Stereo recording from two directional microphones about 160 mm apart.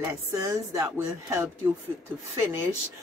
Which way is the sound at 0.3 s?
20° right (ahead or behind).